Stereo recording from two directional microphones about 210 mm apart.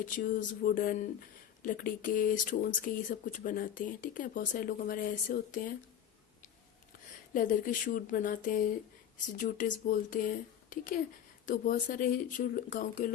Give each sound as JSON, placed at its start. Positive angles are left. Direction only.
{"t": 0.0, "sound": "speech", "side_deg": 40}
{"t": 7.3, "sound": "speech", "side_deg": 40}